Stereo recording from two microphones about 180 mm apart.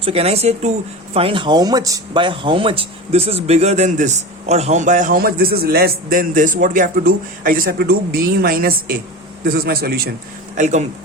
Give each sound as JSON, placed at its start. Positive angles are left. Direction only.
{"t": 0.0, "sound": "a man's voice", "side_deg": -30}
{"t": 10.6, "sound": "speech", "side_deg": -40}